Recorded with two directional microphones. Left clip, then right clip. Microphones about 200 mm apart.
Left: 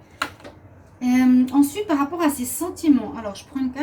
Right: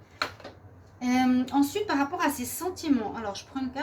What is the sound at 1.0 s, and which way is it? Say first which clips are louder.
A woman's voice: left 7 dB; 40° right (ahead or behind).